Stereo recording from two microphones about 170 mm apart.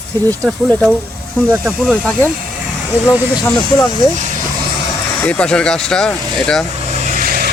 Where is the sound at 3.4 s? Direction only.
15° left (ahead or behind).